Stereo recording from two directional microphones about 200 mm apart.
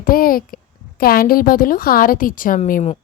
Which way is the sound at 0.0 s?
45° left (ahead or behind).